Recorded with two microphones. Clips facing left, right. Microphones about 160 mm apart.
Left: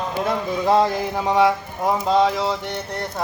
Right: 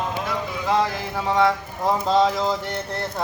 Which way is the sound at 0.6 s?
30° left (ahead or behind).